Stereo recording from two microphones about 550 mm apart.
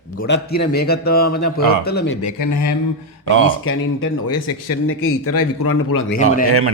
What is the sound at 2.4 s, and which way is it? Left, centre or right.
Speech, left.